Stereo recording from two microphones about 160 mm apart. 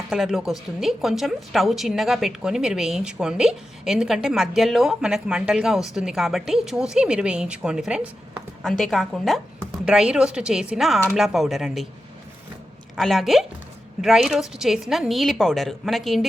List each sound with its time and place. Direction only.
0.1 s a woman's voice: centre (ahead or behind)
13.0 s a woman's voice: centre (ahead or behind)